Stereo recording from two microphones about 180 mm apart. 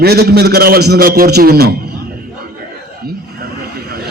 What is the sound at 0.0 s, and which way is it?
A man's voice, 60° right (ahead or behind).